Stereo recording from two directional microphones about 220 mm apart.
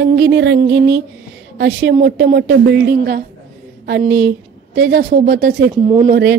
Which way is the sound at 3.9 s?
50° right (ahead or behind).